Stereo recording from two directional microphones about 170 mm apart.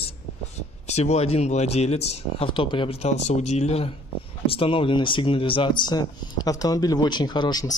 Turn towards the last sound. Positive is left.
turn(degrees=25)  # may be behind; listen again after turning